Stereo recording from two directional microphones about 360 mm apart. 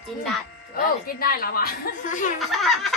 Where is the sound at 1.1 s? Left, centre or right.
Left.